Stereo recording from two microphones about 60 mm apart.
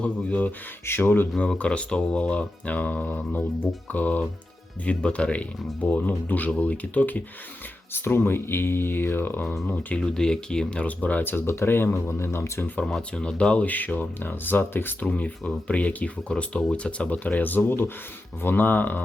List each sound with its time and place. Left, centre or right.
0.0 s speech: left
0.9 s speech: left
1.4 s speech: centre
7.9 s speech: left
9.6 s speech: left
10.0 s speech: centre; by 12.7 s left
13.0 s speech: centre; by 19.0 s left